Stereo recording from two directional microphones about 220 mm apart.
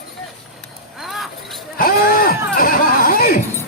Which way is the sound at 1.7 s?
40° left (ahead or behind).